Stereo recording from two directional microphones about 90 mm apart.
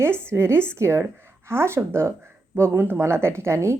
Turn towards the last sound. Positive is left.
turn(degrees=-30)  # may be behind; listen again after turning